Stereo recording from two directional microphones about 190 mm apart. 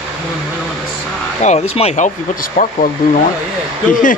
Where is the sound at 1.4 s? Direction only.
35° left (ahead or behind).